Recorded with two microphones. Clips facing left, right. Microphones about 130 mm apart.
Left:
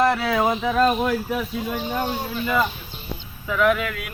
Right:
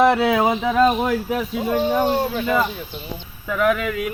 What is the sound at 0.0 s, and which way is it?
Speech, 20° right (ahead or behind).